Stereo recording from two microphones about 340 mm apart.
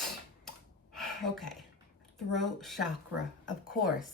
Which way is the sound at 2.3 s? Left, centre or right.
Centre.